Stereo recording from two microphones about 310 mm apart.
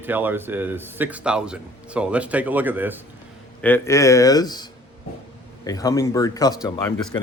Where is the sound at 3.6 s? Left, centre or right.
Centre.